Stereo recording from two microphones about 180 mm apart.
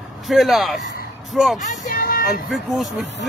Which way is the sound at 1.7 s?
50° left (ahead or behind).